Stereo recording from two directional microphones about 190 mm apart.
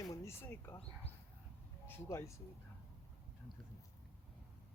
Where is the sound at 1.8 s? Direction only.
15° left (ahead or behind).